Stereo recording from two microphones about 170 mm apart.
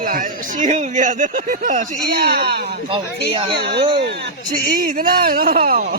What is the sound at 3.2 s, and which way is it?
Speech, 35° right (ahead or behind).